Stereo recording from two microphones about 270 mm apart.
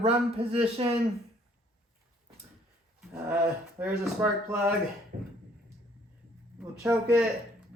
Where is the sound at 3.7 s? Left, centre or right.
Centre.